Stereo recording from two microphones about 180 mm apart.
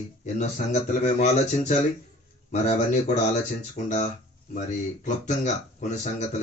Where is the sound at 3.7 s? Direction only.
40° left (ahead or behind).